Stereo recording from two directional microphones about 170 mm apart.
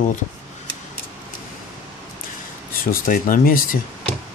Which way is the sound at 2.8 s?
55° left (ahead or behind).